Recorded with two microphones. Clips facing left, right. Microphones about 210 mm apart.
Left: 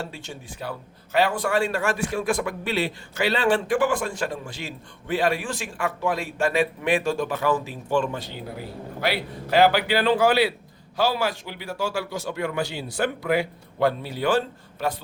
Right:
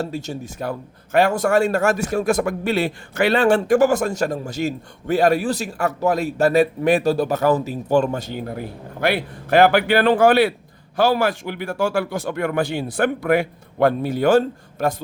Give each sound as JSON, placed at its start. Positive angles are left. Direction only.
{"t": 0.0, "sound": "a man's voice", "side_deg": -40}